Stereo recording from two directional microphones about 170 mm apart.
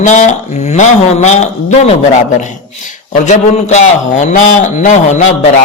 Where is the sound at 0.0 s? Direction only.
45° left (ahead or behind).